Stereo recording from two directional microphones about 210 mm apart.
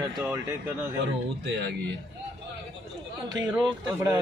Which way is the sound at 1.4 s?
55° right (ahead or behind).